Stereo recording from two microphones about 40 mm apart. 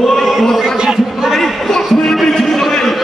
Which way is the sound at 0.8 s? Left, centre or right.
Centre.